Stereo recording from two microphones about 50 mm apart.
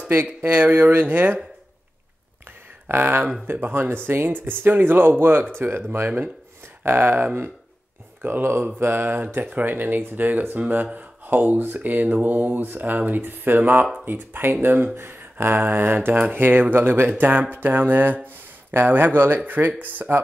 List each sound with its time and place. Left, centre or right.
0.2 s speech: right
2.9 s speech: right